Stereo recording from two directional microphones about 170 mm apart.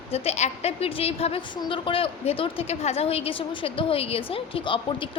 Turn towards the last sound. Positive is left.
turn(degrees=30)  # may be behind; listen again after turning